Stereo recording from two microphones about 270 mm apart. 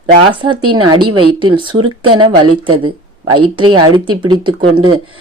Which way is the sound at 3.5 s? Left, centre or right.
Centre.